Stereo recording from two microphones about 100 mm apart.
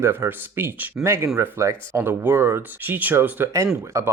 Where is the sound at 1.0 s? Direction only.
30° right (ahead or behind).